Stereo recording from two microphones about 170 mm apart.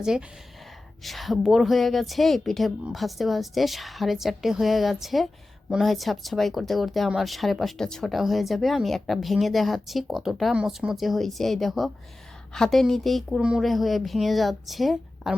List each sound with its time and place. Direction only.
0.0 s speech: 5° right (ahead or behind)